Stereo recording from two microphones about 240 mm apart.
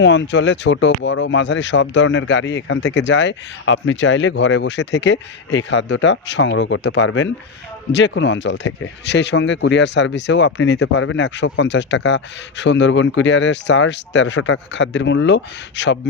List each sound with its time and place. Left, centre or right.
0.0 s speech: left